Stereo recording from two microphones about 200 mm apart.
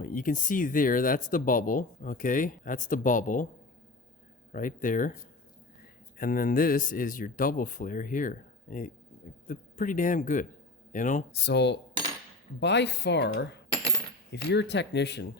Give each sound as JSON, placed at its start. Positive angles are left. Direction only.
{"t": 0.0, "sound": "speech", "side_deg": 45}
{"t": 4.5, "sound": "speech", "side_deg": 40}
{"t": 6.1, "sound": "speech", "side_deg": 45}
{"t": 11.3, "sound": "speech", "side_deg": 60}
{"t": 14.4, "sound": "speech", "side_deg": 60}